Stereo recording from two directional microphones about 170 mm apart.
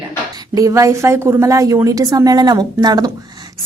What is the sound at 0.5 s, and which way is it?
Speech, 20° right (ahead or behind).